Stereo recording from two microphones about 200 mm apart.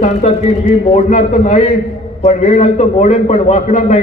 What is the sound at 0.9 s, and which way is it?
A man's voice, 35° left (ahead or behind).